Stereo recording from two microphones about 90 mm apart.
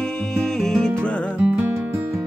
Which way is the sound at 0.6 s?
5° left (ahead or behind).